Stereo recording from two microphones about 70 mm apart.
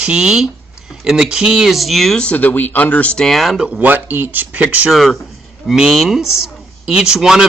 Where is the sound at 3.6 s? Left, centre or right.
Right.